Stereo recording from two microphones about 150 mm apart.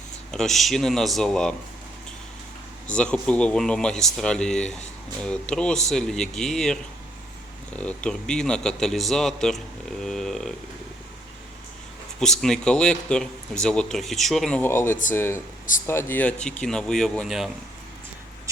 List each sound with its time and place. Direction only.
0.3 s speech: 5° left (ahead or behind)
2.8 s speech: 5° left (ahead or behind)
7.8 s speech: 10° left (ahead or behind)
12.2 s speech: 5° left (ahead or behind)